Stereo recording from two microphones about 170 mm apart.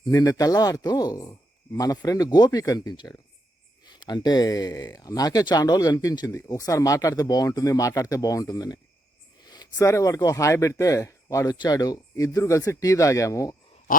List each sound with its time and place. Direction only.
0.1 s speech: 20° left (ahead or behind)